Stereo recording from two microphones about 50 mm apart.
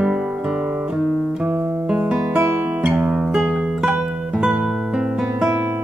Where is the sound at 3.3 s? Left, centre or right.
Centre.